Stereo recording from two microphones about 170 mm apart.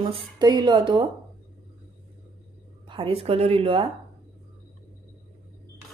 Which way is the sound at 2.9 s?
35° right (ahead or behind).